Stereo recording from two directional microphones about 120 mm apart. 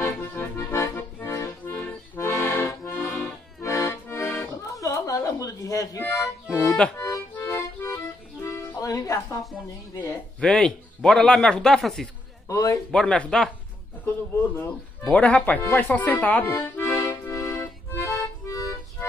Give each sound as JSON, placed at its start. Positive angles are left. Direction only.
{"t": 0.0, "sound": "accordion", "side_deg": 20}
{"t": 10.4, "sound": "speech", "side_deg": 5}
{"t": 12.4, "sound": "a man's voice", "side_deg": 25}
{"t": 12.9, "sound": "speech", "side_deg": 10}
{"t": 15.6, "sound": "accordion", "side_deg": 15}